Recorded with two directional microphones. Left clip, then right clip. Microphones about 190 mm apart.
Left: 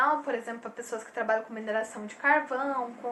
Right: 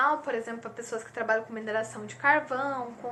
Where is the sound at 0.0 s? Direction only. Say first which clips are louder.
Even; 15° right (ahead or behind).